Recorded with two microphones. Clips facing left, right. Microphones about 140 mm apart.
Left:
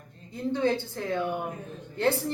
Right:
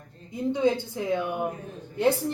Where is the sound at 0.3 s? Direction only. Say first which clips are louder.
Right 2 dB; 15° right (ahead or behind).